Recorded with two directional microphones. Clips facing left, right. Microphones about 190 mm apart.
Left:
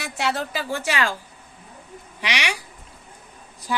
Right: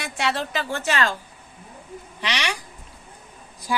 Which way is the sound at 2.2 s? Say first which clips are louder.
Even; 10° left (ahead or behind).